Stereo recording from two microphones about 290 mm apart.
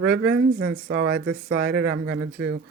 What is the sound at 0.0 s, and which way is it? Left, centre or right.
Speech, right.